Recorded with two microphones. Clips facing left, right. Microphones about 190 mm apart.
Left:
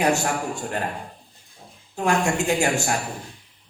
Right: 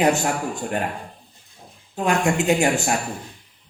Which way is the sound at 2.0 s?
20° right (ahead or behind).